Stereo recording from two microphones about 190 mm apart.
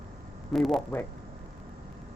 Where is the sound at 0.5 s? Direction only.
Centre (ahead or behind).